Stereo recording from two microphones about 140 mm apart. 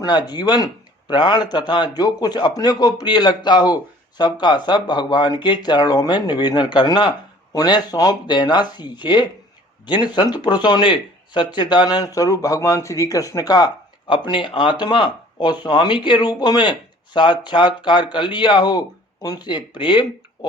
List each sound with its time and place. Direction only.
0.0 s a man's voice: 30° left (ahead or behind)